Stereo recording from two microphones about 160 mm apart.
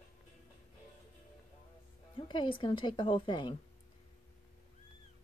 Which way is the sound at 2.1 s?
30° left (ahead or behind).